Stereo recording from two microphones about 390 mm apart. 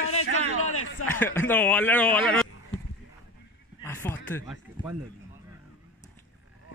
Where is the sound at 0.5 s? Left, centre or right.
Left.